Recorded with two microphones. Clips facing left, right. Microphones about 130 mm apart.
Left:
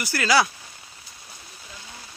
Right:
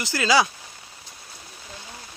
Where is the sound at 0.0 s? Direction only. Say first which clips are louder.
Right 1 dB; 20° right (ahead or behind).